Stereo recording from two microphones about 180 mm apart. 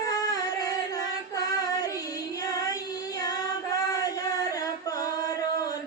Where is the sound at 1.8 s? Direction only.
20° left (ahead or behind).